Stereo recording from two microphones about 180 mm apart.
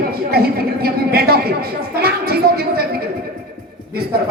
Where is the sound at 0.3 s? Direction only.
60° right (ahead or behind).